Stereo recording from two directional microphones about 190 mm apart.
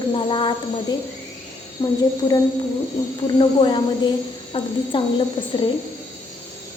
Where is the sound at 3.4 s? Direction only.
25° left (ahead or behind).